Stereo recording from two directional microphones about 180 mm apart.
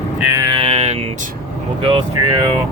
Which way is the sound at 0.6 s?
35° right (ahead or behind).